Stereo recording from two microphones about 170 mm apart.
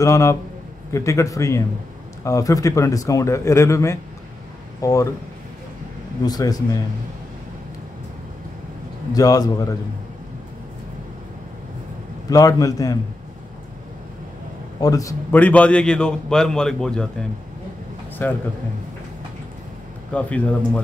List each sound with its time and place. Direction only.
0.0 s speech: 20° left (ahead or behind)
6.2 s speech: 20° left (ahead or behind)
9.1 s speech: 20° left (ahead or behind)
12.3 s speech: 20° left (ahead or behind)
14.8 s a man's voice: 20° left (ahead or behind); by 17.1 s 5° left (ahead or behind)
18.2 s speech: 10° left (ahead or behind)
20.1 s speech: 10° left (ahead or behind)